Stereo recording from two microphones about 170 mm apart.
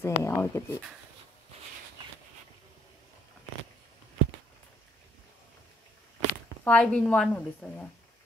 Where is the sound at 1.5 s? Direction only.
35° right (ahead or behind).